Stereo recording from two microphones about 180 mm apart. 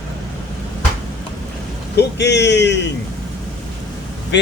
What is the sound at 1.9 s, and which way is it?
Speech, 70° left (ahead or behind).